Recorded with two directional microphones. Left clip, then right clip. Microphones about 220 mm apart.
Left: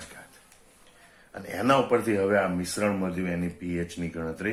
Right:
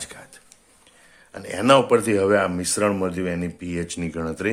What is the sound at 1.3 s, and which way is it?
Speech, 40° right (ahead or behind).